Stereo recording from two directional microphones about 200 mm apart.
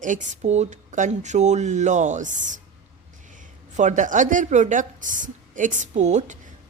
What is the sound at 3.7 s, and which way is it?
A woman's voice, 35° right (ahead or behind).